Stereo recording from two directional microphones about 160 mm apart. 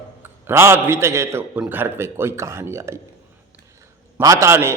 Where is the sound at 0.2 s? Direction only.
15° right (ahead or behind).